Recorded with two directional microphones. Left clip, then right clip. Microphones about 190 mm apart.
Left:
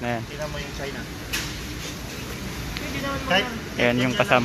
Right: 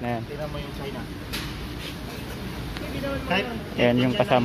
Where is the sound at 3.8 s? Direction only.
20° right (ahead or behind).